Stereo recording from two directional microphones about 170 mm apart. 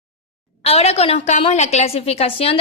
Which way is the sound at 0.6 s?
35° left (ahead or behind).